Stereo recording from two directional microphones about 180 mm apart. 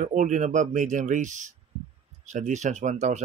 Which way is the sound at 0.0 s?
45° right (ahead or behind).